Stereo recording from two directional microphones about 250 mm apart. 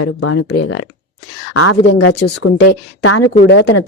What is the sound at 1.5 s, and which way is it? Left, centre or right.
Speech, left.